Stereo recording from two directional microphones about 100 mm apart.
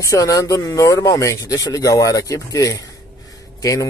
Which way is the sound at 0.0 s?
35° left (ahead or behind).